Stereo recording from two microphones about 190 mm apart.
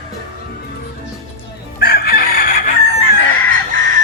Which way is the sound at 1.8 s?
55° left (ahead or behind).